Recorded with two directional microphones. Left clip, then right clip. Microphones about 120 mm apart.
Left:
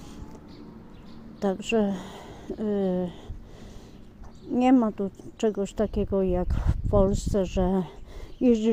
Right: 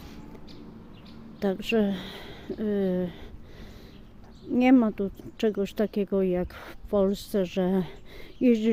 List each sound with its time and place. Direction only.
1.4 s a woman's voice: 15° right (ahead or behind)
4.5 s speech: 25° right (ahead or behind)